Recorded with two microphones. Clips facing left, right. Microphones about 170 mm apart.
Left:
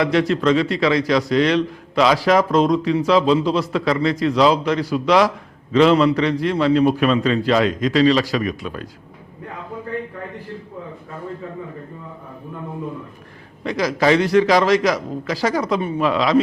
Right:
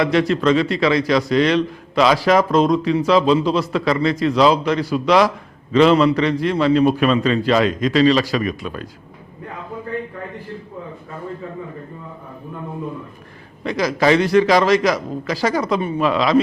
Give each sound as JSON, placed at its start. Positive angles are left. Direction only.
{"t": 0.0, "sound": "a man's voice", "side_deg": -15}
{"t": 9.5, "sound": "a sound", "side_deg": -20}
{"t": 11.1, "sound": "a man's voice", "side_deg": -25}
{"t": 13.7, "sound": "a man's voice", "side_deg": -15}